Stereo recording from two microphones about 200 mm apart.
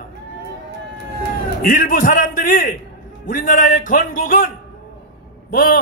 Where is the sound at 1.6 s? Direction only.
45° left (ahead or behind).